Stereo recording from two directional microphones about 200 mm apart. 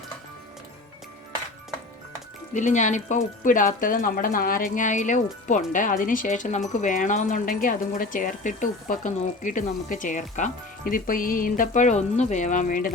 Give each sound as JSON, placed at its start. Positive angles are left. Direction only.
{"t": 2.5, "sound": "speech", "side_deg": 40}